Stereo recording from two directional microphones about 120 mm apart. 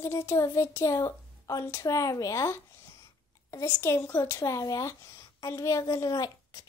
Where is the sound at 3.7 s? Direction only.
20° left (ahead or behind).